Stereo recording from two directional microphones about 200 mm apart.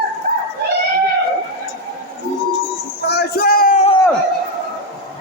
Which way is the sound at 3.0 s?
50° left (ahead or behind).